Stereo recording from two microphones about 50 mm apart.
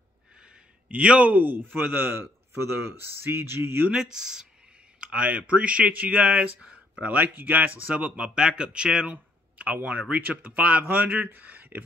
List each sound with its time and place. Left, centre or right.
0.8 s speech: right
1.3 s speech: right
2.5 s speech: right
3.9 s speech: centre
5.0 s speech: right
8.0 s speech: centre
9.1 s a sound: right
10.2 s speech: right